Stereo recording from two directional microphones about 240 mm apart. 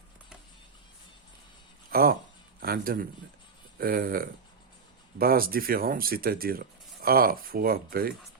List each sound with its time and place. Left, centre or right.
1.9 s a man's voice: right